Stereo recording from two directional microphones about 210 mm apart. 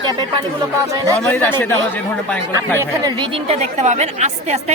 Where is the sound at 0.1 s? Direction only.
20° right (ahead or behind).